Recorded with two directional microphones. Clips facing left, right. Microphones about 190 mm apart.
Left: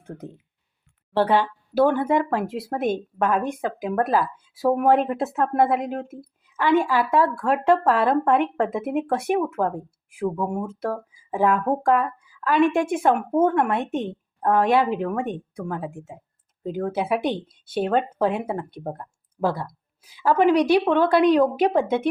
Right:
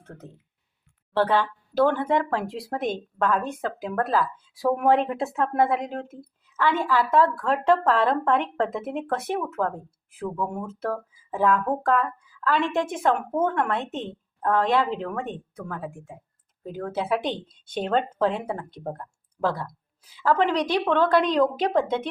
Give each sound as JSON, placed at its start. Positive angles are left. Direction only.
{"t": 0.0, "sound": "speech", "side_deg": 15}
{"t": 4.5, "sound": "speech", "side_deg": 5}
{"t": 10.2, "sound": "speech", "side_deg": 25}
{"t": 10.5, "sound": "a woman's voice", "side_deg": 10}